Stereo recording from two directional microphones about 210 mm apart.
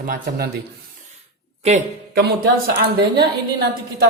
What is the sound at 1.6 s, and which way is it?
Speech, 30° right (ahead or behind).